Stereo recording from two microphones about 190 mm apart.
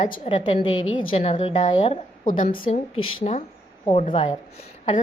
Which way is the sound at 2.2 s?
45° left (ahead or behind).